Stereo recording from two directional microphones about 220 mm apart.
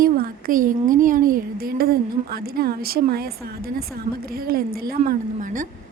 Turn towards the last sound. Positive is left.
turn(degrees=-35)  # may be behind; listen again after turning